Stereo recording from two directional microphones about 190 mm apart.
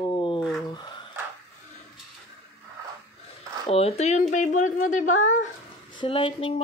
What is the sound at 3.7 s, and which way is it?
Speech, 30° left (ahead or behind).